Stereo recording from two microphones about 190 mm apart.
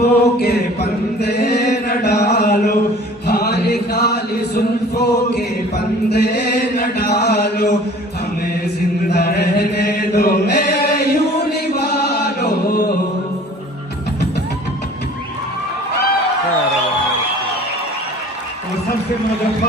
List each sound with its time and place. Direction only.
0.0 s chant: 55° left (ahead or behind)
9.0 s chant: 60° left (ahead or behind)